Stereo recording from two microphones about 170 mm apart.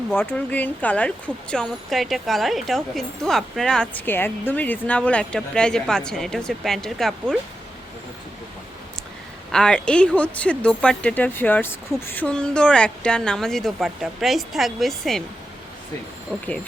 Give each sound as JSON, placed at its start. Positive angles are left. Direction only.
{"t": 0.1, "sound": "speech", "side_deg": 10}
{"t": 9.5, "sound": "speech", "side_deg": 5}
{"t": 16.3, "sound": "speech", "side_deg": 0}